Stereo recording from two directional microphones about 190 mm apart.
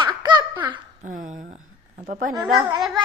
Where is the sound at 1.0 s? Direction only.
45° right (ahead or behind).